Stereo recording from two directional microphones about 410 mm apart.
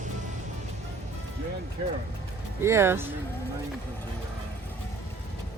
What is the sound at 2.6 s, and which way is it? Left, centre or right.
Speech, centre.